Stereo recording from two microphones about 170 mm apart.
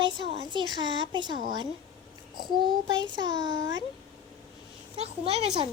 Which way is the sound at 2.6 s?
25° right (ahead or behind).